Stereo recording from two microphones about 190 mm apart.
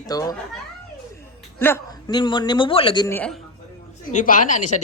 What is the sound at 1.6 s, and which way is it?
Speech, 15° left (ahead or behind).